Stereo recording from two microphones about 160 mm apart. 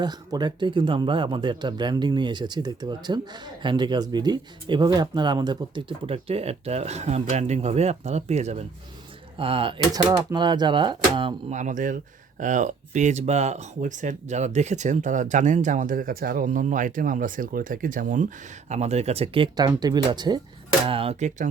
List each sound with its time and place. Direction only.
0.0 s speech: 25° right (ahead or behind)
11.5 s speech: 55° right (ahead or behind)